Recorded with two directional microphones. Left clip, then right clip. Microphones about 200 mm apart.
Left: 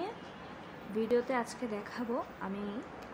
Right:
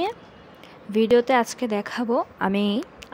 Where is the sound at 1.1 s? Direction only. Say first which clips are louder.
Right 13 dB; 50° right (ahead or behind).